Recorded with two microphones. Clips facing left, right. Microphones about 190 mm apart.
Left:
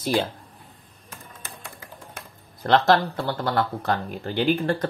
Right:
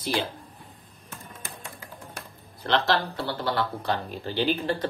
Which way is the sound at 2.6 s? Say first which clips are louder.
Left 6 dB; 45° left (ahead or behind).